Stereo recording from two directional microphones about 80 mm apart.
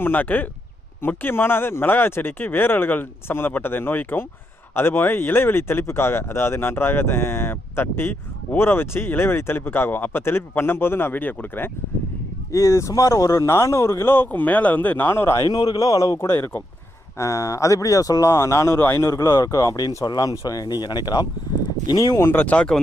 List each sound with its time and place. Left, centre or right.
0.0 s speech: left
12.5 s speech: left
15.4 s speech: left
16.1 s speech: left
17.2 s speech: left
21.8 s speech: left
22.3 s speech: left